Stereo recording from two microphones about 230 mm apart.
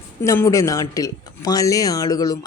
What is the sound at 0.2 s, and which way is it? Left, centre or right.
A woman's voice, centre.